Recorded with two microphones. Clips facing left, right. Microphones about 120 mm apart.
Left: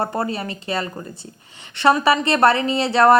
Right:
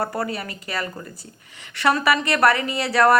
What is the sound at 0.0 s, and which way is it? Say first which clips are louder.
A woman's voice: left 3 dB; 25° left (ahead or behind).